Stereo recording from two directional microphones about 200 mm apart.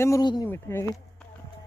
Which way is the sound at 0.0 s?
15° left (ahead or behind).